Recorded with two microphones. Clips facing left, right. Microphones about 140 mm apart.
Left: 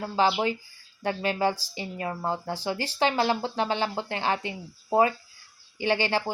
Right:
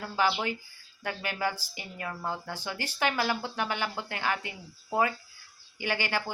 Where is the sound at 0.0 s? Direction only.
30° left (ahead or behind).